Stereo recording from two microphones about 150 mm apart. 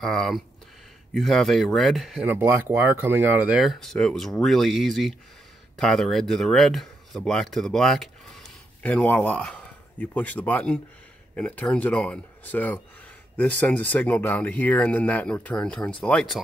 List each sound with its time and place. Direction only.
0.0 s speech: centre (ahead or behind)
2.2 s speech: 10° right (ahead or behind); by 16.3 s 5° left (ahead or behind)